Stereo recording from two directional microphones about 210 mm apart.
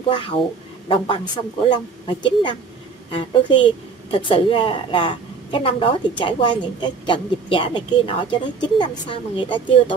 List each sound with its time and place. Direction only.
0.1 s a woman's voice: 25° left (ahead or behind)